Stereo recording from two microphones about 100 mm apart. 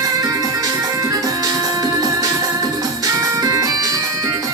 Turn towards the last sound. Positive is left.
turn(degrees=-35)  # may be behind; listen again after turning